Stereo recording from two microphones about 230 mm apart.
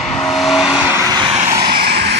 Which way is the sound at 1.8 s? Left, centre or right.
Right.